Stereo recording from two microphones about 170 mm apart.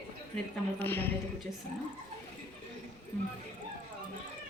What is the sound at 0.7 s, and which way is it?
Speech, 10° left (ahead or behind).